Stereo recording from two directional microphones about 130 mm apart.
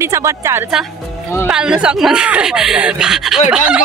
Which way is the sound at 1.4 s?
5° right (ahead or behind).